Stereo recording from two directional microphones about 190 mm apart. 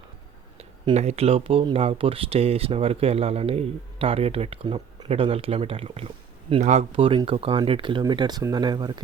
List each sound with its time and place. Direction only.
0.9 s speech: 35° right (ahead or behind)